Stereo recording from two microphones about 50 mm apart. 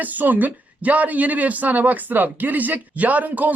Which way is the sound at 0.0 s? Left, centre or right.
Right.